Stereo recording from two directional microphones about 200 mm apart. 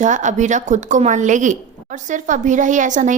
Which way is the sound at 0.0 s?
40° right (ahead or behind).